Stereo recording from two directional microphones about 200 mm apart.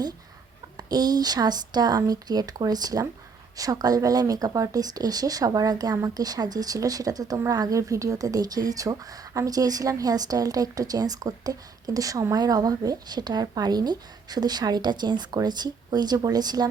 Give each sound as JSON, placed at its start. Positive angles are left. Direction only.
{"t": 0.8, "sound": "speech", "side_deg": -20}